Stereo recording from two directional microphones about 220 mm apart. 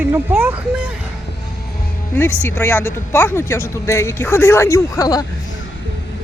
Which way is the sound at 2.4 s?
10° left (ahead or behind).